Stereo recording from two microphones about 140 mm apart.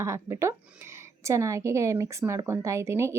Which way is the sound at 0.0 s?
20° right (ahead or behind).